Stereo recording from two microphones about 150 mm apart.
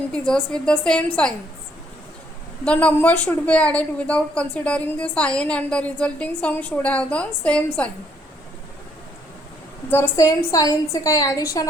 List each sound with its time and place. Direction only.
0.1 s a woman's voice: 5° left (ahead or behind)
2.6 s a woman's voice: 10° left (ahead or behind)
9.9 s a woman's voice: 15° left (ahead or behind)